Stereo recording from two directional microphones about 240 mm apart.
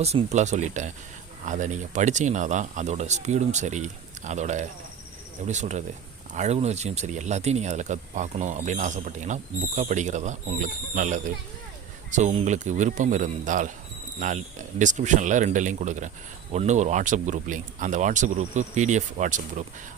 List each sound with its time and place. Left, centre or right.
0.0 s speech: right